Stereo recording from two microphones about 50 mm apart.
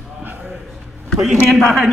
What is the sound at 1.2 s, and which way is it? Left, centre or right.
Speech, centre.